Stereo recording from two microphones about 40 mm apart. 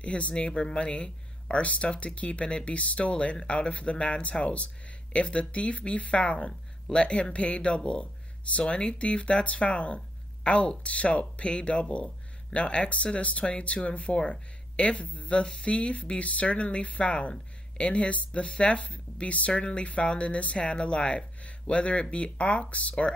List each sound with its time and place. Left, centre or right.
0.0 s speech: left